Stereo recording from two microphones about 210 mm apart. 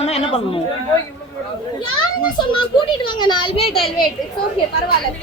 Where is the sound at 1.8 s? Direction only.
25° left (ahead or behind).